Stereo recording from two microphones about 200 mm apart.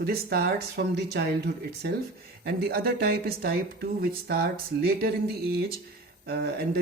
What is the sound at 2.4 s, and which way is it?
Speech, 50° right (ahead or behind).